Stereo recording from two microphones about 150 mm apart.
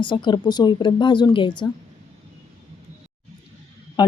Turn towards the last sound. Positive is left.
turn(degrees=25)  # may be behind; listen again after turning